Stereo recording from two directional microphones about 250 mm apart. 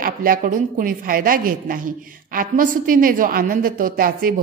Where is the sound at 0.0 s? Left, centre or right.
Right.